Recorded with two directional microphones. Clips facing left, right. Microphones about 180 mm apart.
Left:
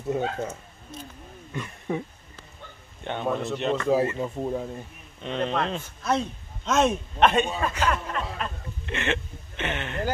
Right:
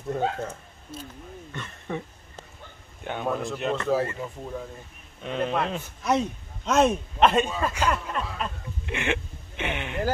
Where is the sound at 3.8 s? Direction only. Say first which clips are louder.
Left 4 dB; 20° left (ahead or behind).